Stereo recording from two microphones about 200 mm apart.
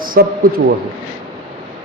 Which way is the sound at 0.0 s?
45° right (ahead or behind).